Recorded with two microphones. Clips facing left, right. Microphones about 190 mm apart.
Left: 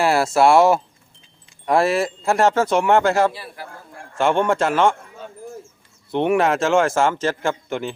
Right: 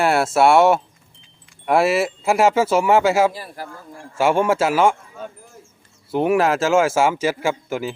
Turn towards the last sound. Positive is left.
turn(degrees=-5)  # may be behind; listen again after turning